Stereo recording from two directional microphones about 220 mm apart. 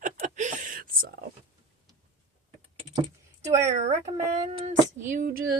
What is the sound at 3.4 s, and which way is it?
Speech, 30° right (ahead or behind).